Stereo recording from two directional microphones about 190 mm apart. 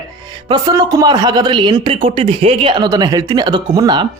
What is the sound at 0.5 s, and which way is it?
Speech, 20° right (ahead or behind).